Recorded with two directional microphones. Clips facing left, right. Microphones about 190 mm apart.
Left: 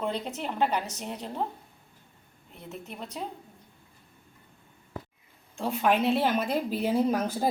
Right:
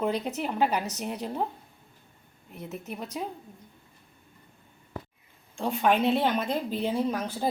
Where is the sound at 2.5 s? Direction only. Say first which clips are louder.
Right 4 dB; 5° right (ahead or behind).